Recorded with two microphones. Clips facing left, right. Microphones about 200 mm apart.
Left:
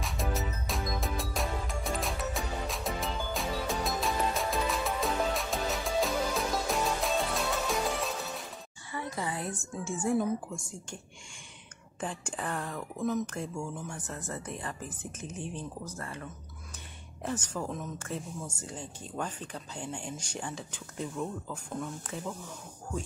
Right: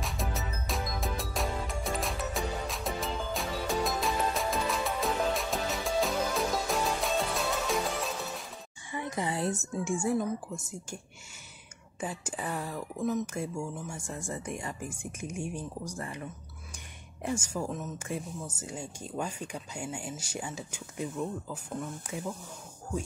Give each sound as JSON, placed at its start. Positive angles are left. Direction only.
{"t": 0.0, "sound": "music", "side_deg": 0}
{"t": 8.9, "sound": "a sound", "side_deg": -20}
{"t": 12.0, "sound": "speech", "side_deg": -10}